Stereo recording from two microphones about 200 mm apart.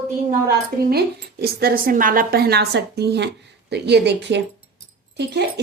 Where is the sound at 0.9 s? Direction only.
50° right (ahead or behind).